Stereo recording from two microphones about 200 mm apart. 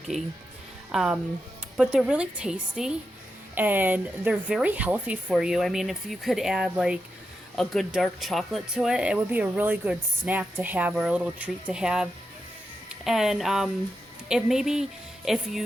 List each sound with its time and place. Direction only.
0.1 s speech: 35° right (ahead or behind)
0.9 s speech: 5° right (ahead or behind)